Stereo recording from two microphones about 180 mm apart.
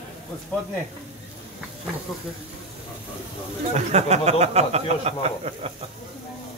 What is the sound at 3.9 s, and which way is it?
Speech, 40° right (ahead or behind).